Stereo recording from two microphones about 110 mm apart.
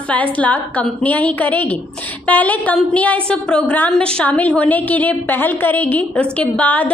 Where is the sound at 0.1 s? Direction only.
15° left (ahead or behind).